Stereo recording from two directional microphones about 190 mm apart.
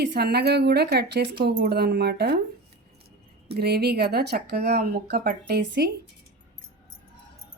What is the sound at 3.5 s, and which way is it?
Speech, 55° right (ahead or behind).